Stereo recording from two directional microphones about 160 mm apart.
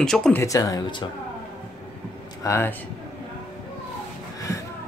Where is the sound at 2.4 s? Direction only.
15° left (ahead or behind).